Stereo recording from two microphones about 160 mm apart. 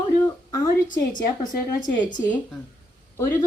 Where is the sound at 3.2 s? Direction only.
20° left (ahead or behind).